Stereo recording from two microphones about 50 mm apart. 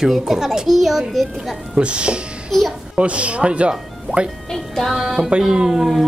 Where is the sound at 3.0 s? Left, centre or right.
Right.